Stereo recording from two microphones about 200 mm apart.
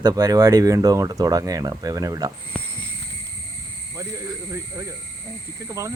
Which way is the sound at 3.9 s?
15° right (ahead or behind).